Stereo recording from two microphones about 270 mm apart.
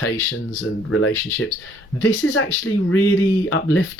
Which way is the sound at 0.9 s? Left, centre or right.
Left.